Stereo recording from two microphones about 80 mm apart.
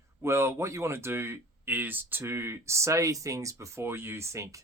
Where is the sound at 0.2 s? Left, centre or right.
Right.